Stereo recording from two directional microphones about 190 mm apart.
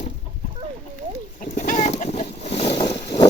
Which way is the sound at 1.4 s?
45° left (ahead or behind).